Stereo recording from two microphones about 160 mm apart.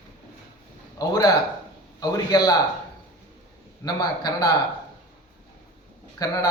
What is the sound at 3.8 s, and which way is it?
Speech, 25° left (ahead or behind).